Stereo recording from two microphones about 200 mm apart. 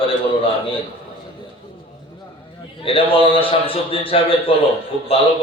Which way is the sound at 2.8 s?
25° left (ahead or behind).